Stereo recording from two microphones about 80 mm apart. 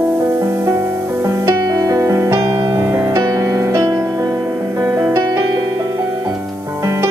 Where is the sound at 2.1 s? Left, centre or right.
Right.